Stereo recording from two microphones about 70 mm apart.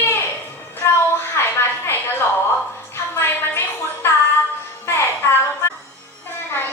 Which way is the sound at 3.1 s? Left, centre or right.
Left.